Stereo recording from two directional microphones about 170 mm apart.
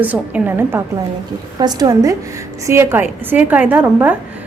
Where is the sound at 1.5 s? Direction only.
25° right (ahead or behind).